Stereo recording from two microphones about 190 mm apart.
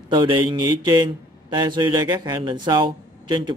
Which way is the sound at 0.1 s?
25° right (ahead or behind).